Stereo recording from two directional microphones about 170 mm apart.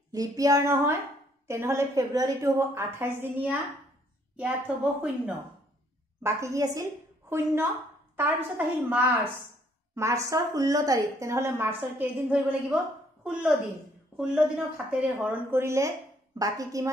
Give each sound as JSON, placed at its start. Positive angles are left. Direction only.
{"t": 0.1, "sound": "a woman's voice", "side_deg": -20}